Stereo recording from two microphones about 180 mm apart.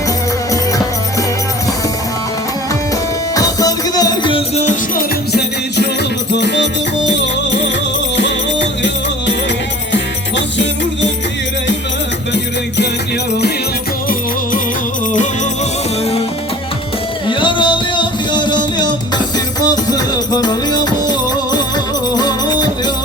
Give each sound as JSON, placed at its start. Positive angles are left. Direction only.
{"t": 3.3, "sound": "music", "side_deg": 20}
{"t": 5.3, "sound": "music", "side_deg": 70}
{"t": 12.3, "sound": "music", "side_deg": 70}
{"t": 17.2, "sound": "music", "side_deg": 25}